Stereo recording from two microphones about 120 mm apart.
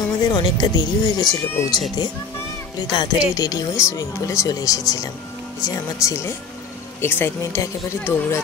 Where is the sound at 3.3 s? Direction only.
30° left (ahead or behind).